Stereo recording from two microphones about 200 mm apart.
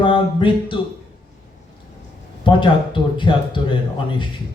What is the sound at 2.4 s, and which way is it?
Speech, 25° left (ahead or behind).